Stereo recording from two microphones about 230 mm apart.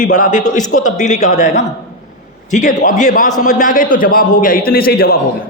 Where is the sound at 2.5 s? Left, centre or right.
Left.